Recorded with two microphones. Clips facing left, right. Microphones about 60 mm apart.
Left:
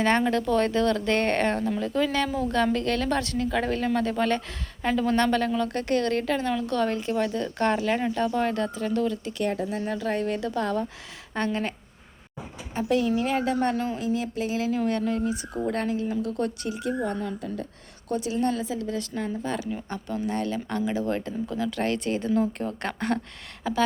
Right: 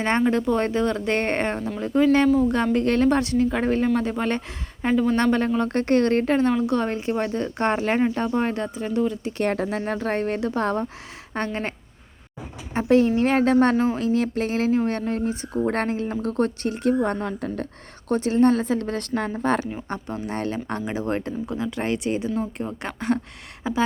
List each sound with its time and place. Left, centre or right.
0.3 s a woman's voice: right
9.4 s a woman's voice: right
12.7 s speech: right
19.9 s a woman's voice: right
21.4 s speech: right